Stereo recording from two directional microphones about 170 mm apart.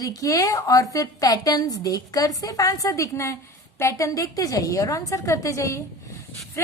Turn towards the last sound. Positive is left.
turn(degrees=15)  # may be behind; listen again after turning